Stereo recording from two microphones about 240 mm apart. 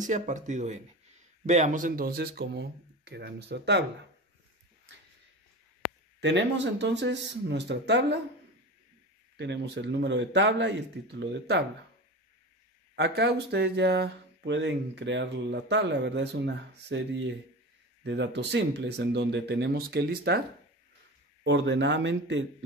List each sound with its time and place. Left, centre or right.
0.0 s speech: right
6.2 s speech: right
9.4 s speech: right
12.9 s speech: right
21.5 s speech: right